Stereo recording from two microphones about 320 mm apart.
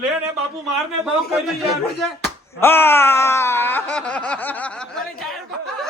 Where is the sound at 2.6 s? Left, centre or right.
Centre.